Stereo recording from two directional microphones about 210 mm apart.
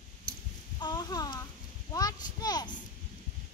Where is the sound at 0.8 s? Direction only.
20° left (ahead or behind).